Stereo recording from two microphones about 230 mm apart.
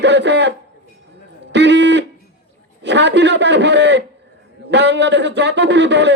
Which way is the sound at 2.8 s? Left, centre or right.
Right.